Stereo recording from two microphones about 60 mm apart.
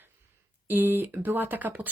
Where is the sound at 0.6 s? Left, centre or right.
Right.